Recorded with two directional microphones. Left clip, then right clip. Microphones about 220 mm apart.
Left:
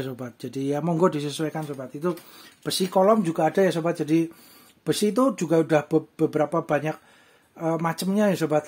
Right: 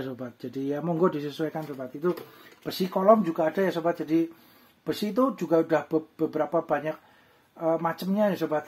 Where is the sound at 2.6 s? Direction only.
45° left (ahead or behind).